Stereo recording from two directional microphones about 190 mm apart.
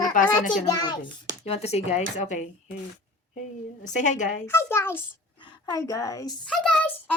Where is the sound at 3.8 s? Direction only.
40° left (ahead or behind).